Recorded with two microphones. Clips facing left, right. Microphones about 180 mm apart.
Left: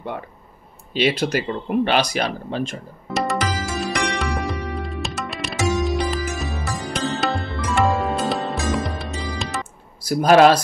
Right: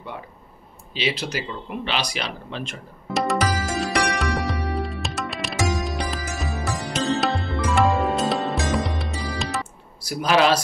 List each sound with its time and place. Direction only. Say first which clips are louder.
0.9 s speech: left 7 dB; 55° left (ahead or behind)
3.1 s music: even; centre (ahead or behind)
10.0 s speech: left 7 dB; 45° left (ahead or behind)